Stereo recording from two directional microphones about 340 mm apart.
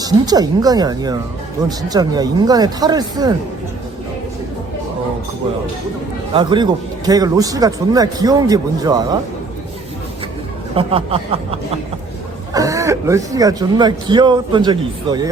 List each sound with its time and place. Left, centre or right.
0.0 s a man's voice: centre
6.3 s a man's voice: centre
10.8 s a man's voice: centre